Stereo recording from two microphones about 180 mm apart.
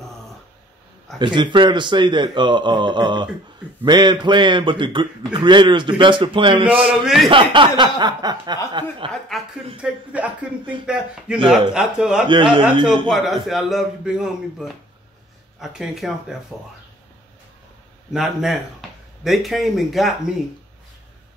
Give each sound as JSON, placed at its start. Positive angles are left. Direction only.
{"t": 1.2, "sound": "a man's voice", "side_deg": -25}
{"t": 6.8, "sound": "speech", "side_deg": -5}
{"t": 7.2, "sound": "a man's voice", "side_deg": -25}
{"t": 9.3, "sound": "speech", "side_deg": 0}
{"t": 18.1, "sound": "speech", "side_deg": 0}